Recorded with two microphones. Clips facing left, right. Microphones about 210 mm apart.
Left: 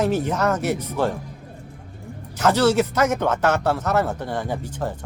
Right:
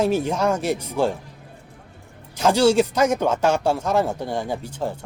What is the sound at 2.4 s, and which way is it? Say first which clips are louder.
Speech: right 1 dB; 10° right (ahead or behind).